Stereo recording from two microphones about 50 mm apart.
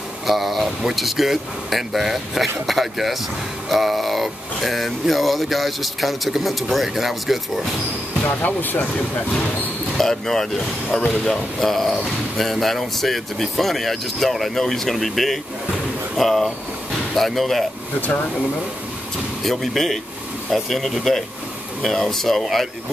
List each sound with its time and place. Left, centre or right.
0.3 s speech: centre
8.2 s speech: left
9.9 s speech: centre
18.0 s speech: left
19.4 s speech: centre